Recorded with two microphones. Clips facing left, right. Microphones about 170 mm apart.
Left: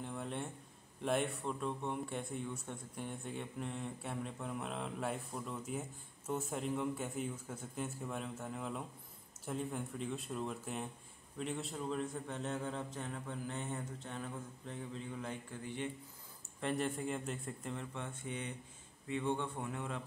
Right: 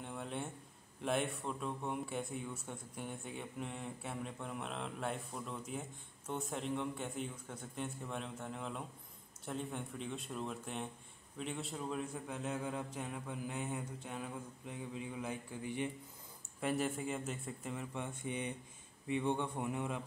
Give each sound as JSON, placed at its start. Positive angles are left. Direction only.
{"t": 0.0, "sound": "a sound", "side_deg": 0}
{"t": 1.0, "sound": "a man's voice", "side_deg": 0}
{"t": 16.6, "sound": "a man's voice", "side_deg": -5}
{"t": 17.9, "sound": "a man's voice", "side_deg": -15}